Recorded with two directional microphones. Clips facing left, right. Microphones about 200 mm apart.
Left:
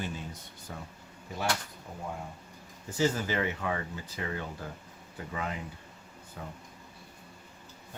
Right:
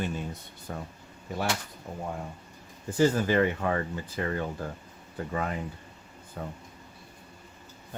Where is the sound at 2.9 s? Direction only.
55° right (ahead or behind).